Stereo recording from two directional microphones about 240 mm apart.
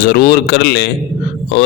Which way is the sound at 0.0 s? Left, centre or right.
Left.